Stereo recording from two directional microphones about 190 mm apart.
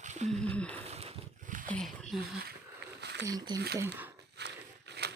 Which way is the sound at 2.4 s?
60° right (ahead or behind).